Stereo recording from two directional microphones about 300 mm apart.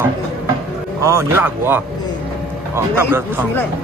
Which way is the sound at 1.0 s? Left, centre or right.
Centre.